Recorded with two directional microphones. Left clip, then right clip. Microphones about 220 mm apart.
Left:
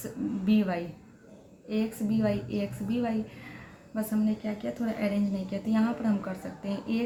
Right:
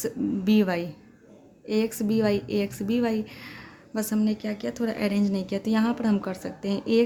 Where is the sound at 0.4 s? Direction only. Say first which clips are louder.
Right 4 dB; 55° right (ahead or behind).